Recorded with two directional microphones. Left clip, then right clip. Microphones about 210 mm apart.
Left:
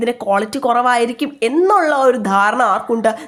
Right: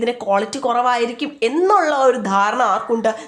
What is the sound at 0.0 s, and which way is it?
A woman's voice, 15° left (ahead or behind).